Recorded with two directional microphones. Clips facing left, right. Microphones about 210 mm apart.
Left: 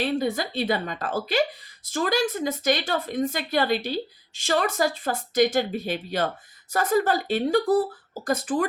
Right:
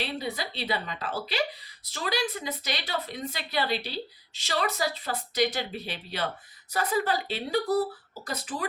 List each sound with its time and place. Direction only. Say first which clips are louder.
0.0 s a woman's voice: left 8 dB; 45° left (ahead or behind)